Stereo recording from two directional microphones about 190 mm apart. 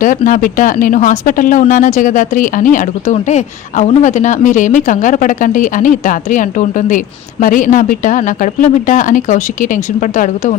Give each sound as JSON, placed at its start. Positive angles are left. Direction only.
{"t": 0.0, "sound": "speech", "side_deg": 45}